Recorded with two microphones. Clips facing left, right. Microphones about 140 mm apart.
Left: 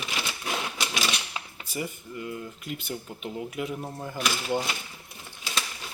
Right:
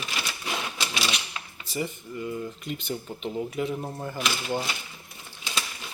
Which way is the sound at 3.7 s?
5° right (ahead or behind).